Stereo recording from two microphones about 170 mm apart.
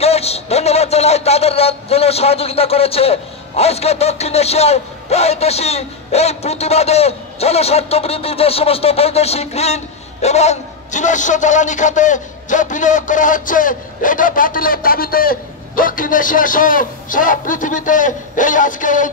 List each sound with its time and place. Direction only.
0.0 s a man's voice: 35° left (ahead or behind)